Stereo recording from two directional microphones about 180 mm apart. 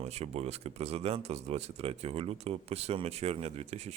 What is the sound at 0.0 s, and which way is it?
Speech, 35° right (ahead or behind).